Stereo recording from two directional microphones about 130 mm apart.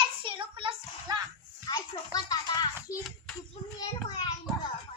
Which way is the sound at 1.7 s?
30° left (ahead or behind).